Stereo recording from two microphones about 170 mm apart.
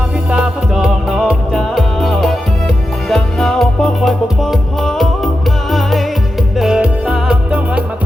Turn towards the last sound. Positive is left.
turn(degrees=-5)  # may be behind; listen again after turning